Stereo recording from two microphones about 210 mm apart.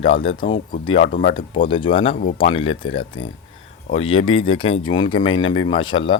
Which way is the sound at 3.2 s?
75° left (ahead or behind).